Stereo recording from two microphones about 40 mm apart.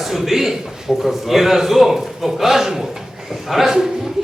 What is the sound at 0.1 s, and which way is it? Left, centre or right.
A man's voice, centre.